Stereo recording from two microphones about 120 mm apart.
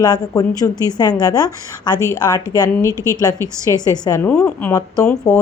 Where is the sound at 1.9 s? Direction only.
25° right (ahead or behind).